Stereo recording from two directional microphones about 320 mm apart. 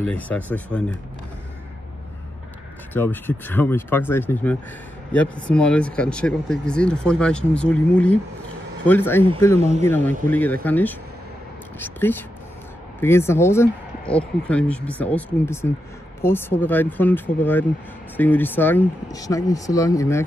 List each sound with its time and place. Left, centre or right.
0.0 s speech: centre
2.9 s speech: centre
9.6 s speech: centre
9.8 s speech: centre